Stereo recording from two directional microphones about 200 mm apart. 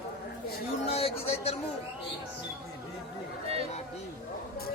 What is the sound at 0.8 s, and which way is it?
Speech, 30° left (ahead or behind).